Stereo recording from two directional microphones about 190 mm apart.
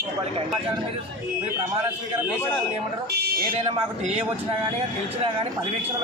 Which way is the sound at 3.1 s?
55° right (ahead or behind).